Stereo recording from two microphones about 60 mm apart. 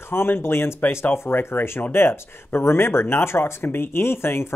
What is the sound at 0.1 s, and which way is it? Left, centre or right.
Speech, left.